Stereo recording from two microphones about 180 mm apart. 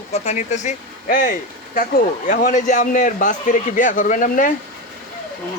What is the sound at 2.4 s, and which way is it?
Speech, 45° left (ahead or behind).